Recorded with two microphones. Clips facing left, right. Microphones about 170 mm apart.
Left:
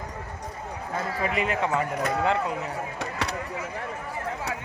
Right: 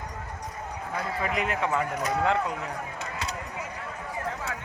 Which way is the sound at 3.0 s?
65° left (ahead or behind).